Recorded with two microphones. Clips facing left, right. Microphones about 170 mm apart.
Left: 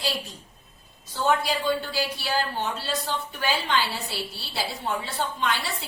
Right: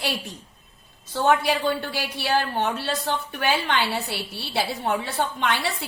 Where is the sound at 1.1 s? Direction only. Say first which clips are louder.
Right 3 dB; 60° right (ahead or behind).